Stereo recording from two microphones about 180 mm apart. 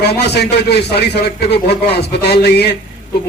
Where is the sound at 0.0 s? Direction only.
65° left (ahead or behind).